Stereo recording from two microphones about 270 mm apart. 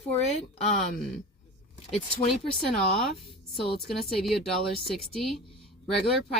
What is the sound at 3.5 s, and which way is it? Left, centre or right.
A woman's voice, centre.